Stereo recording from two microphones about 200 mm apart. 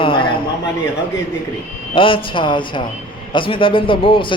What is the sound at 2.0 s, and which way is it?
A man's voice, 25° left (ahead or behind).